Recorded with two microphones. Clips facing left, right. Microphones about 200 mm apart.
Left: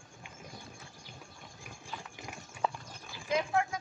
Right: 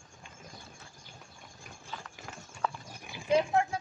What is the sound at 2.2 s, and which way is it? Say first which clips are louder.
Clip-clop: left 1 dB; 15° left (ahead or behind).